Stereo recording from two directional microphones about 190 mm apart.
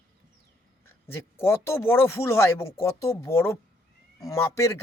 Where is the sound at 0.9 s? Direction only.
10° left (ahead or behind).